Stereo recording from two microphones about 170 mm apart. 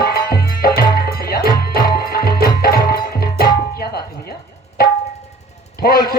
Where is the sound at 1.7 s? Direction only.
60° left (ahead or behind).